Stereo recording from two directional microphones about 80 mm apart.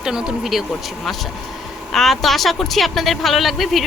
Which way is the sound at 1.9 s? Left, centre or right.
Centre.